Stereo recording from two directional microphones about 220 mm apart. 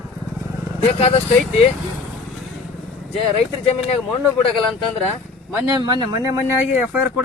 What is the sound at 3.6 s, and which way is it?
Speech, 25° left (ahead or behind).